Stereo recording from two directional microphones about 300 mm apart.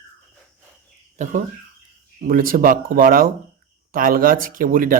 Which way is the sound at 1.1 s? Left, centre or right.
Right.